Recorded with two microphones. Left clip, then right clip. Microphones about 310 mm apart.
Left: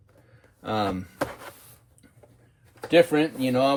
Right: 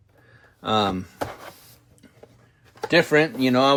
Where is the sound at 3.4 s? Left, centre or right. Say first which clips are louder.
Right 4 dB; right.